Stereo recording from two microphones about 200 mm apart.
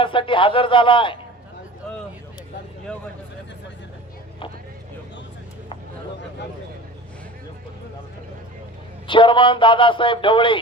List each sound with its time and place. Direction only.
0.0 s speech: 25° left (ahead or behind)
9.0 s speech: 25° left (ahead or behind)